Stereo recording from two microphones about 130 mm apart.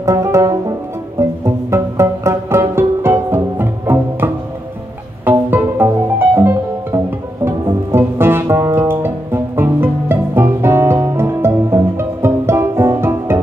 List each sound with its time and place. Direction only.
0.0 s music: 20° right (ahead or behind)